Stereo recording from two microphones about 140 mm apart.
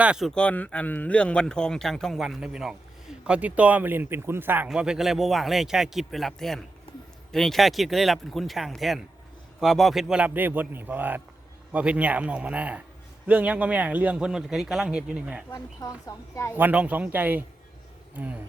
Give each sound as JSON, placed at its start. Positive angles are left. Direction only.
{"t": 0.0, "sound": "a man's voice", "side_deg": -5}
{"t": 15.5, "sound": "speech", "side_deg": 25}
{"t": 16.6, "sound": "a man's voice", "side_deg": -10}